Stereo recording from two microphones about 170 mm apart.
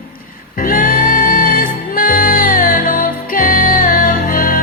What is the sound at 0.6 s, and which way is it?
Music, 55° left (ahead or behind).